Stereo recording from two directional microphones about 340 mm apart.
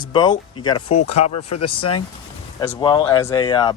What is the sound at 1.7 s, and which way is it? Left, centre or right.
Speech, left.